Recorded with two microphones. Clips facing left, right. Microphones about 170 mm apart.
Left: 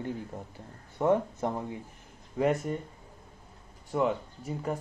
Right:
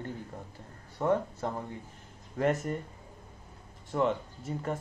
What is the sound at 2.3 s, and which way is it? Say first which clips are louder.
Speech: left 1 dB; centre (ahead or behind).